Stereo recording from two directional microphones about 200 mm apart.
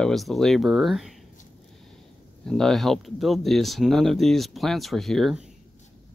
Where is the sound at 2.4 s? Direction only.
5° left (ahead or behind).